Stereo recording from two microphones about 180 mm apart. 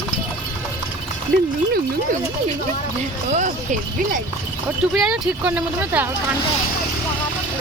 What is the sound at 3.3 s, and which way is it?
Speech, 40° right (ahead or behind).